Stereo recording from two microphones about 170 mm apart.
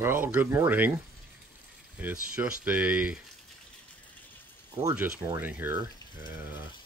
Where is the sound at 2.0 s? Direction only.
10° right (ahead or behind).